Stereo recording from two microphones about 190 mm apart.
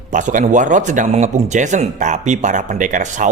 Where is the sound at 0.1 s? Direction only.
40° right (ahead or behind).